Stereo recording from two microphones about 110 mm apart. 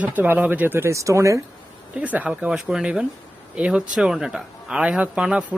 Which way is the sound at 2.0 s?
15° right (ahead or behind).